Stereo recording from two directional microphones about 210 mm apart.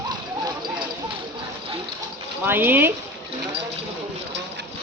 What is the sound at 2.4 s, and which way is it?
Speech, 10° right (ahead or behind).